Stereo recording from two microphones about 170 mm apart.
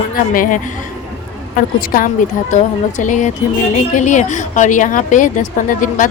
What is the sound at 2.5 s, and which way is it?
Speech, 45° left (ahead or behind).